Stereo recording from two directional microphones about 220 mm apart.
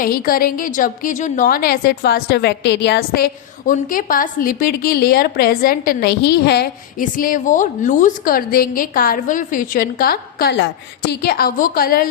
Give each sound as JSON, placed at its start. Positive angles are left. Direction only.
{"t": 0.0, "sound": "a woman's voice", "side_deg": 40}